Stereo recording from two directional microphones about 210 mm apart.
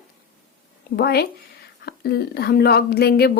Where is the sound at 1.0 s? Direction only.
50° left (ahead or behind).